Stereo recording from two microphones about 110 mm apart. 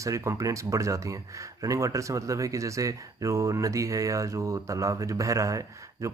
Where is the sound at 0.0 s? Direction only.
30° right (ahead or behind).